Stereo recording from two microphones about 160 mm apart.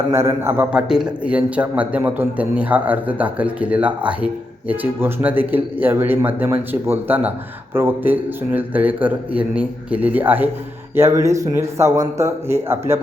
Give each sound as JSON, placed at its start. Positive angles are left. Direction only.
{"t": 0.1, "sound": "speech", "side_deg": -15}